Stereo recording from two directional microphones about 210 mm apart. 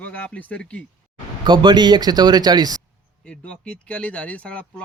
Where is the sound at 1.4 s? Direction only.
20° right (ahead or behind).